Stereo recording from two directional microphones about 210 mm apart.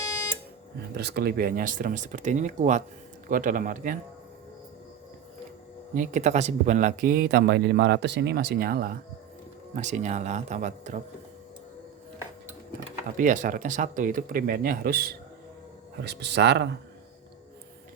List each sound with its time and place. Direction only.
0.9 s speech: 50° right (ahead or behind)
5.9 s speech: 35° right (ahead or behind)
13.1 s speech: 40° right (ahead or behind); by 16.6 s 55° right (ahead or behind)